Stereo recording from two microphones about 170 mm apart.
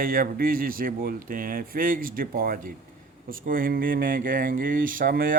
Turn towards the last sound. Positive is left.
turn(degrees=-55)  # may be behind; listen again after turning